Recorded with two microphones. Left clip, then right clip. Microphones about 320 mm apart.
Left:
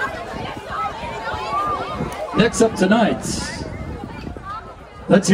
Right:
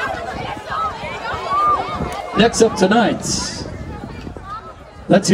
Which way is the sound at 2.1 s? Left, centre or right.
Centre.